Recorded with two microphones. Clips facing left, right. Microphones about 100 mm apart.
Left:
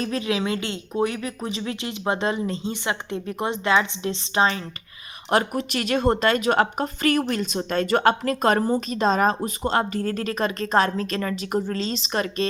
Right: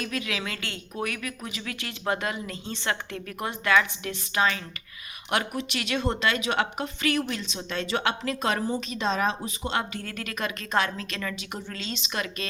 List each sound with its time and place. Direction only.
0.0 s speech: 30° left (ahead or behind)
2.7 s a woman's voice: 15° left (ahead or behind); by 12.5 s 35° left (ahead or behind)